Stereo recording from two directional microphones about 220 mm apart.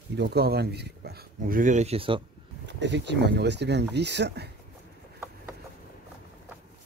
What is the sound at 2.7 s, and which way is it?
Speech, 55° right (ahead or behind).